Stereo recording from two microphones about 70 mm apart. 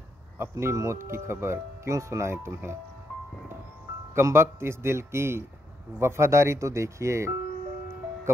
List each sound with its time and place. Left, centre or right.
0.4 s speech: right
4.1 s speech: right